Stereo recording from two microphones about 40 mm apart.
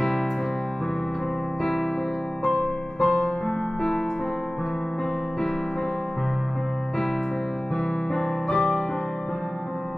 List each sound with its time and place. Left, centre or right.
2.4 s music: centre
8.5 s music: left